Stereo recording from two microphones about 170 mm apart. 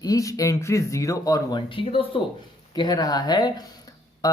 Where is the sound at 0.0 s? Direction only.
20° left (ahead or behind).